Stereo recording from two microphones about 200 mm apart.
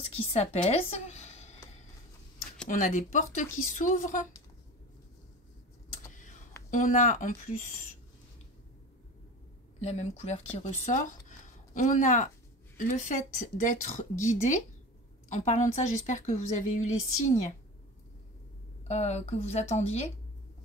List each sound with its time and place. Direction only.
0.0 s speech: 30° left (ahead or behind)
2.7 s a woman's voice: 40° left (ahead or behind)
6.7 s a woman's voice: 40° left (ahead or behind)
9.8 s a woman's voice: 35° left (ahead or behind)
11.2 s a sound: 40° left (ahead or behind)
12.8 s a woman's voice: 40° left (ahead or behind)
18.9 s a woman's voice: 35° left (ahead or behind)